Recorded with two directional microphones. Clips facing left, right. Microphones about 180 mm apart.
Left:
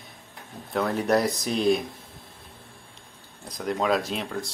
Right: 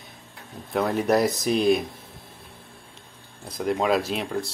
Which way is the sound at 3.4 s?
5° right (ahead or behind).